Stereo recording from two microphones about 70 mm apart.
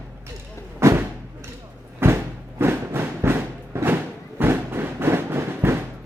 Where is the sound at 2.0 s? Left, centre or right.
Right.